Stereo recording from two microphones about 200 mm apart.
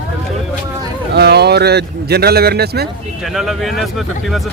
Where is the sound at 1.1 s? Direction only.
55° right (ahead or behind).